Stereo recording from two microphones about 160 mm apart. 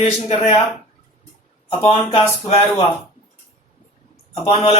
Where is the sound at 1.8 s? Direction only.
40° left (ahead or behind).